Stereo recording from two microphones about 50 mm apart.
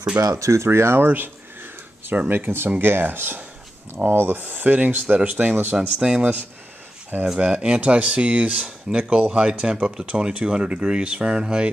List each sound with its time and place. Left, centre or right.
0.4 s speech: right
0.7 s speech: right
1.0 s a sound: right
2.1 s speech: right
5.8 s speech: centre
7.1 s speech: right
7.5 s speech: right